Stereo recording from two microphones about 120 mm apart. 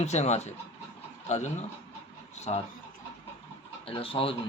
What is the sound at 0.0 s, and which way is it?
Speech, 70° left (ahead or behind).